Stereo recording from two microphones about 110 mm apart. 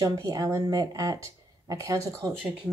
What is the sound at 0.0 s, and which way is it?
Speech, 30° right (ahead or behind).